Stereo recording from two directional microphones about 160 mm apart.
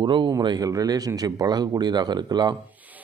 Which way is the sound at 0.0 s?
30° right (ahead or behind).